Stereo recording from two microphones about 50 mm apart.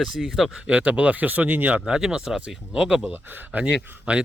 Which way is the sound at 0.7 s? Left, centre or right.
Right.